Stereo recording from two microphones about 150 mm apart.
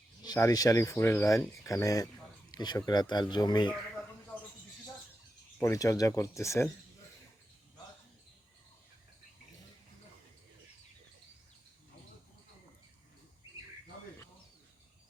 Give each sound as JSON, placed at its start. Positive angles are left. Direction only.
{"t": 0.2, "sound": "speech", "side_deg": 25}
{"t": 5.5, "sound": "speech", "side_deg": 20}